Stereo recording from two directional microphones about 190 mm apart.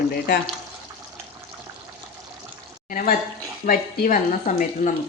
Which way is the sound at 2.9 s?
45° left (ahead or behind).